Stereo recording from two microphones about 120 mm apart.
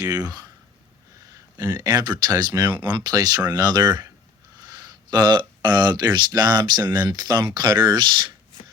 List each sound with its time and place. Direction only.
0.0 s speech: 30° right (ahead or behind)
1.5 s speech: 30° right (ahead or behind)